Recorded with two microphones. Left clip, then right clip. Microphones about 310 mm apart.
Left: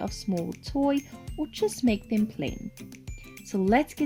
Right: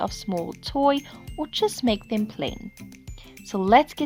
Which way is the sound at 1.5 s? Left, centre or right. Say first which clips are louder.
Right 4 dB; centre.